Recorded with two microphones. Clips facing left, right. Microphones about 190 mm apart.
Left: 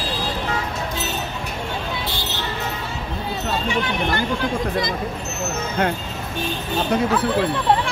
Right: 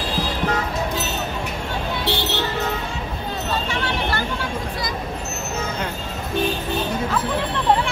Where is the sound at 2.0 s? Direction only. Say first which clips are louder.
Right 5 dB; 70° right (ahead or behind).